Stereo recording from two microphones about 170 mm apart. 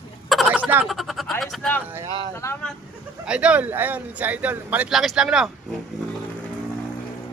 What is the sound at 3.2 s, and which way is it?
Speech, 5° right (ahead or behind).